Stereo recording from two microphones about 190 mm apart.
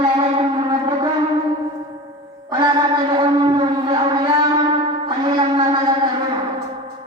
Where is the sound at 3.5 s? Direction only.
25° right (ahead or behind).